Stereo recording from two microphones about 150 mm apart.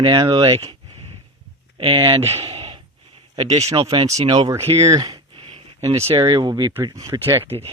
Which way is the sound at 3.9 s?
30° right (ahead or behind).